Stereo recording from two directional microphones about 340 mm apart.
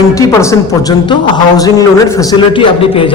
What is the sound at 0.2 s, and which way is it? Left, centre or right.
A woman's voice, centre.